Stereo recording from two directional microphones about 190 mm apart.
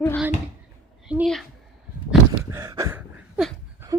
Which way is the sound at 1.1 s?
Centre (ahead or behind).